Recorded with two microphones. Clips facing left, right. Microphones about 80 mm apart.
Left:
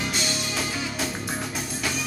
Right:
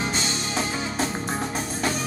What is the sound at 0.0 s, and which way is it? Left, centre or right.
Music, right.